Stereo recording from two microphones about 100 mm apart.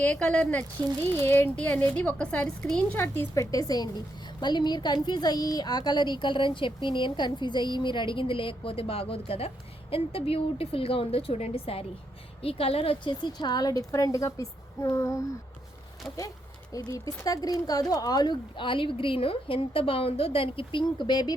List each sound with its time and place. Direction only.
0.0 s speech: 10° left (ahead or behind)
3.0 s speech: 25° left (ahead or behind)
3.5 s a woman's voice: 40° left (ahead or behind); by 13.1 s 70° left (ahead or behind)
13.4 s a woman's voice: 45° left (ahead or behind)
16.0 s speech: centre (ahead or behind)
16.7 s speech: 35° left (ahead or behind)